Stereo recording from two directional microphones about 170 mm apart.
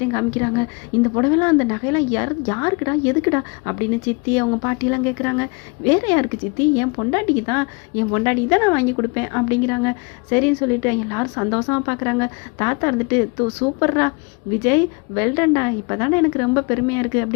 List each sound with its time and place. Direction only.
0.1 s a woman's voice: 10° left (ahead or behind)